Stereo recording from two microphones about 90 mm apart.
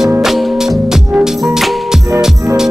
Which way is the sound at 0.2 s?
5° right (ahead or behind).